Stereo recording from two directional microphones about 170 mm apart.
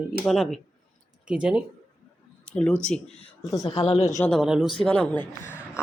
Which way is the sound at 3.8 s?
35° left (ahead or behind).